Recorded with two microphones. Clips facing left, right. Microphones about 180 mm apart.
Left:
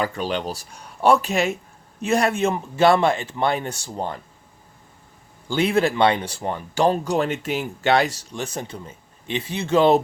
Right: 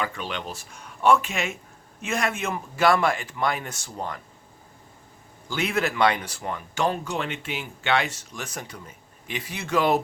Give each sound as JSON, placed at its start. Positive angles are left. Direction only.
{"t": 0.0, "sound": "speech", "side_deg": 35}
{"t": 5.5, "sound": "speech", "side_deg": 30}